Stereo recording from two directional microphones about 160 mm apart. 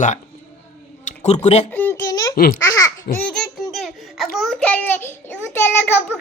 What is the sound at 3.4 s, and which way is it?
Baby laughter, centre (ahead or behind).